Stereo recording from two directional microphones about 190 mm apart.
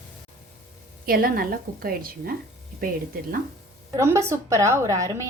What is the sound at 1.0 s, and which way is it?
A woman's voice, 50° right (ahead or behind).